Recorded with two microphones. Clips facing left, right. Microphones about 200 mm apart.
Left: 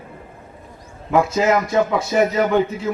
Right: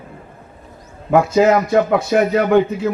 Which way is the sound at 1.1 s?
60° right (ahead or behind).